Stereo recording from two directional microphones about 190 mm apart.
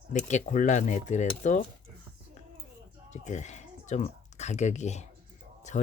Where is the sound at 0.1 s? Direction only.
40° left (ahead or behind).